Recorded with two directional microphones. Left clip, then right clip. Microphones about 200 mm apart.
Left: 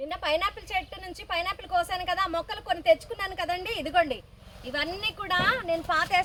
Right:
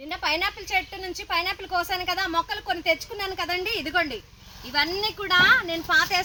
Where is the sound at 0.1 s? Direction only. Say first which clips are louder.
Right 3 dB; 25° left (ahead or behind).